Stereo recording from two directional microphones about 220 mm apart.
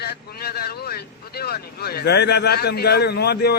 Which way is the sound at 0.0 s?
45° left (ahead or behind).